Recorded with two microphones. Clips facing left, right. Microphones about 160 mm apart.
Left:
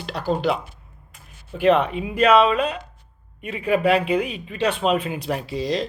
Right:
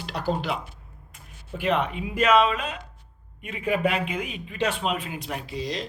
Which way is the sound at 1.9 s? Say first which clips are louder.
Left 4 dB; 30° left (ahead or behind).